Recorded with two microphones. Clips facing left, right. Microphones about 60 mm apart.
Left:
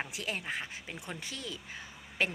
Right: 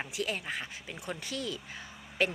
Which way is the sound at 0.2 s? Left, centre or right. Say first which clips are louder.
Right 6 dB; left.